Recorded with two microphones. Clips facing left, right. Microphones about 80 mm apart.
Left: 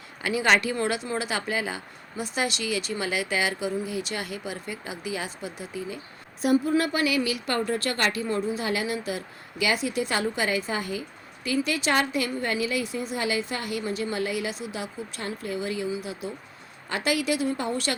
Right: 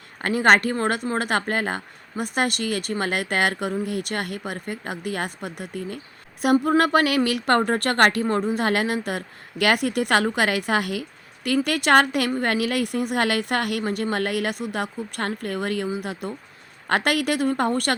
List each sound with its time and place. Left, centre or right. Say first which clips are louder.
0.2 s a woman's voice: right 5 dB; right